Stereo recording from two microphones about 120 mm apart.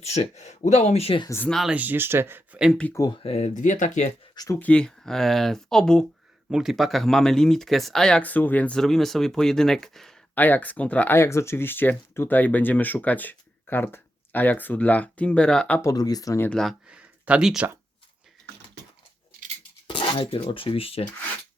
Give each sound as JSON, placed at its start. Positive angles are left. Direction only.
{"t": 0.0, "sound": "speech", "side_deg": 65}
{"t": 1.5, "sound": "speech", "side_deg": 0}
{"t": 1.7, "sound": "speech", "side_deg": -15}
{"t": 3.1, "sound": "speech", "side_deg": 60}
{"t": 4.4, "sound": "speech", "side_deg": 25}
{"t": 4.6, "sound": "speech", "side_deg": 10}
{"t": 10.3, "sound": "speech", "side_deg": 15}
{"t": 15.8, "sound": "speech", "side_deg": 30}
{"t": 16.5, "sound": "speech", "side_deg": 5}
{"t": 16.8, "sound": "a sound", "side_deg": -10}
{"t": 19.9, "sound": "speech", "side_deg": 45}